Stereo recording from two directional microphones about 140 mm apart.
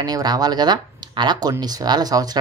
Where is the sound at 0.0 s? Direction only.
30° right (ahead or behind).